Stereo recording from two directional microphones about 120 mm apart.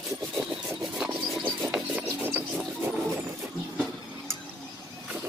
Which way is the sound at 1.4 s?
15° right (ahead or behind).